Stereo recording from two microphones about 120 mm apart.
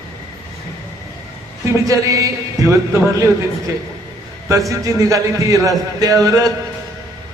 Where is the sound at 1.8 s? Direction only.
30° right (ahead or behind).